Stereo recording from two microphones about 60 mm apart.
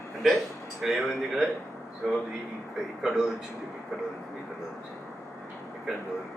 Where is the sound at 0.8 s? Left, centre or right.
Centre.